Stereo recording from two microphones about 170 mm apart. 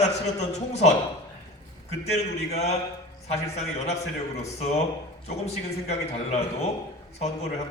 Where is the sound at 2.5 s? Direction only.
40° left (ahead or behind).